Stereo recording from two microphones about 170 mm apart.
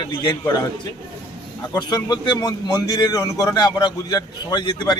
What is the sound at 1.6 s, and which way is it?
A man's voice, 25° left (ahead or behind).